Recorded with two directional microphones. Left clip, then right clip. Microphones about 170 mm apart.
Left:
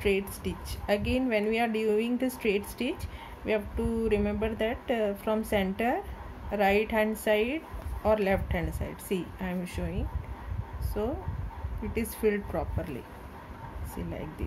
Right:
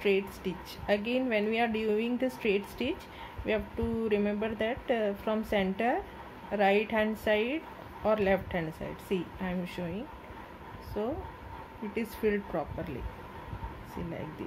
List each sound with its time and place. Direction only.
0.0 s a woman's voice: 10° left (ahead or behind)